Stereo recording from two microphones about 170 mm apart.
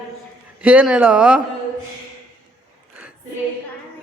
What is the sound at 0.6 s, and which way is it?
Speech, 5° right (ahead or behind).